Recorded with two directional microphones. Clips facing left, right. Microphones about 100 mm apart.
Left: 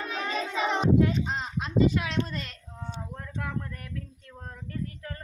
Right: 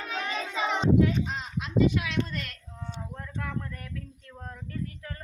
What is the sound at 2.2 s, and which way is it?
Child singing, 25° left (ahead or behind).